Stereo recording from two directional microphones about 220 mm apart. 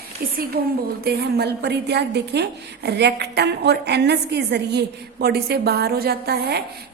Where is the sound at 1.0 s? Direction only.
45° right (ahead or behind).